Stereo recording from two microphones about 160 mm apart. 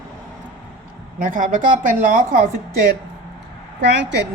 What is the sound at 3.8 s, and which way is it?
Speech, 90° right.